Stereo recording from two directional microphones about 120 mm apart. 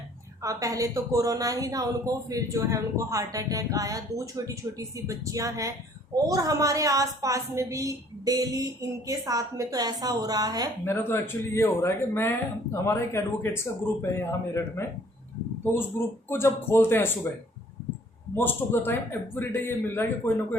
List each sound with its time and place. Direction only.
0.4 s speech: 30° right (ahead or behind)
10.8 s a man's voice: 20° left (ahead or behind)
18.3 s a man's voice: 20° left (ahead or behind)